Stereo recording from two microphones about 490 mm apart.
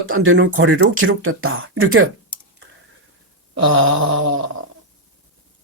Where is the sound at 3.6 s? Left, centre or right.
Right.